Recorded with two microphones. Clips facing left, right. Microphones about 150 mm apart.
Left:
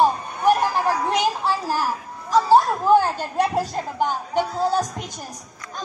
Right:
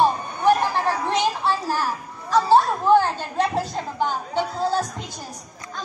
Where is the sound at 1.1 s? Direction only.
10° left (ahead or behind).